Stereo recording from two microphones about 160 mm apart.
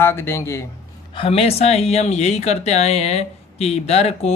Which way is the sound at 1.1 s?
35° left (ahead or behind).